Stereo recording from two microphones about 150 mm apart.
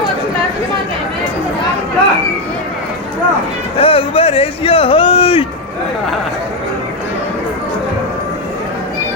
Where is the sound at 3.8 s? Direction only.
40° left (ahead or behind).